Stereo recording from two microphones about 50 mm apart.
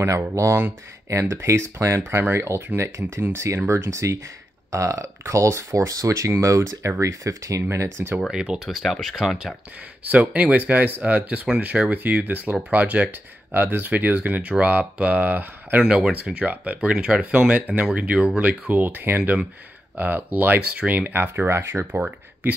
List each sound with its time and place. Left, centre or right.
0.2 s speech: right
7.7 s speech: right
8.3 s speech: centre
8.6 s speech: centre
10.0 s speech: right
16.1 s speech: right
17.3 s speech: right
21.5 s speech: right